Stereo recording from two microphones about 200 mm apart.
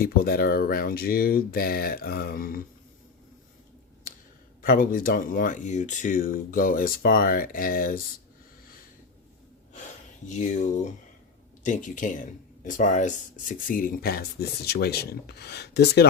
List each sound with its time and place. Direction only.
0.0 s speech: 50° left (ahead or behind)
4.6 s speech: 45° left (ahead or behind)
9.7 s speech: 35° left (ahead or behind); by 16.0 s 55° left (ahead or behind)